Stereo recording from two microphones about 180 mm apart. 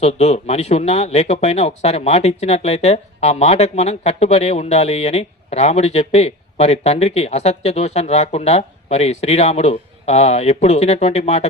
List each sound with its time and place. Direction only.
0.0 s speech: 35° left (ahead or behind)